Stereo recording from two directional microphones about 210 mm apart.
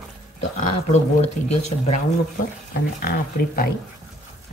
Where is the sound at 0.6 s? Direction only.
35° left (ahead or behind).